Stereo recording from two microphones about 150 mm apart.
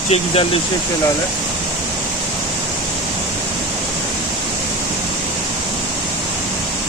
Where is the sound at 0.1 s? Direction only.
40° left (ahead or behind).